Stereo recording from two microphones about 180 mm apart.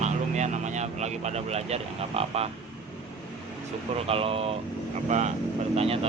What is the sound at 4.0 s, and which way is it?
Speech, 30° right (ahead or behind).